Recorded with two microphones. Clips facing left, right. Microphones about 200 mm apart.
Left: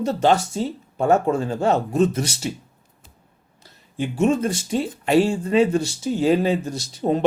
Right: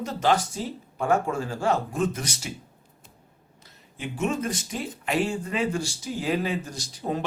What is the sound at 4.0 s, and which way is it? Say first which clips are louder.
Speech: left 8 dB; 30° left (ahead or behind).